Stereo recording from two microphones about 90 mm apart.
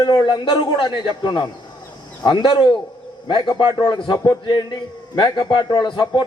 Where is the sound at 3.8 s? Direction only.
55° left (ahead or behind).